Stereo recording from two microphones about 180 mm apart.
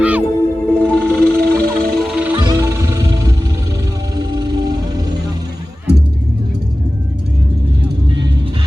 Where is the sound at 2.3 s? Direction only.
20° right (ahead or behind).